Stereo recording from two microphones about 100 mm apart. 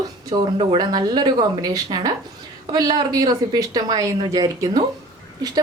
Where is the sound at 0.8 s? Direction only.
45° right (ahead or behind).